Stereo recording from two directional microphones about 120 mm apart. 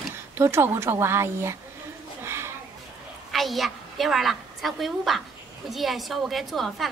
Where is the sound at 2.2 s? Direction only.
20° right (ahead or behind).